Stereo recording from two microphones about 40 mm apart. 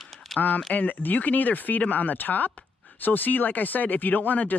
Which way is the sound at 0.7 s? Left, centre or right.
Left.